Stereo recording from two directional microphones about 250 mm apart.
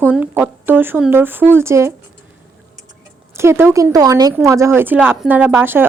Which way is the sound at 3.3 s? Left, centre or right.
Centre.